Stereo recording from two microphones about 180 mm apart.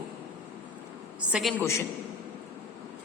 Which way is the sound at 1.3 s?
Centre (ahead or behind).